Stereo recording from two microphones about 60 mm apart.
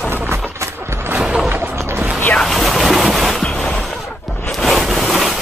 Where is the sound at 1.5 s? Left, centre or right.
Right.